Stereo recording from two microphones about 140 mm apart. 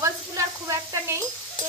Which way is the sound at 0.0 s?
20° right (ahead or behind).